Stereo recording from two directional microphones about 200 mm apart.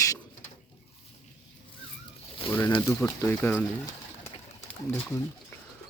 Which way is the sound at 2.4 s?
15° left (ahead or behind).